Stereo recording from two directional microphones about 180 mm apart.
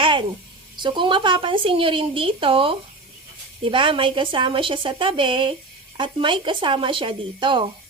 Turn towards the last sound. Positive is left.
turn(degrees=-25)  # may be behind; listen again after turning